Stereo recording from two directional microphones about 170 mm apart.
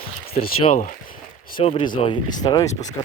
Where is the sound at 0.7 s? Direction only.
45° left (ahead or behind).